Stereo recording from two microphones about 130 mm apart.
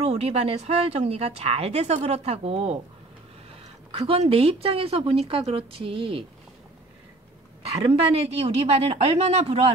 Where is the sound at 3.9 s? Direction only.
50° right (ahead or behind).